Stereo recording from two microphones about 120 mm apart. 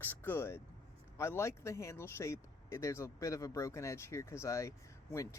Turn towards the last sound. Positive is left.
turn(degrees=25)  # may be behind; listen again after turning